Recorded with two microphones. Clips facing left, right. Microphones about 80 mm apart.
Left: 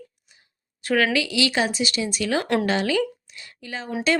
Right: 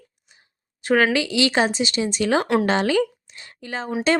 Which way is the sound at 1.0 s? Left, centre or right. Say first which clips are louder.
Right 2 dB; right.